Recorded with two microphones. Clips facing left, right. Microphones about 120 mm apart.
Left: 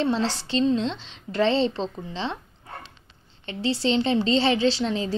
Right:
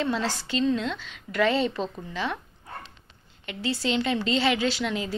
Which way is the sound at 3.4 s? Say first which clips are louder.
Left 4 dB; 30° left (ahead or behind).